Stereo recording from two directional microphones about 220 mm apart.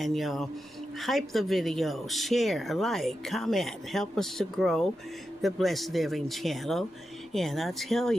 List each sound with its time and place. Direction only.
0.0 s speech: centre (ahead or behind)